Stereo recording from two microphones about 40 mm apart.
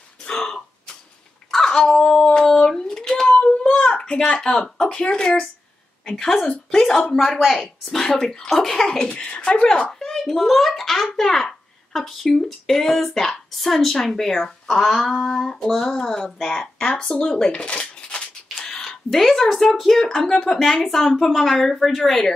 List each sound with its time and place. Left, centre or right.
0.2 s a sound: centre
4.8 s speech: left
9.2 s speech: left
18.6 s a sound: centre
18.9 s speech: centre
20.0 s speech: centre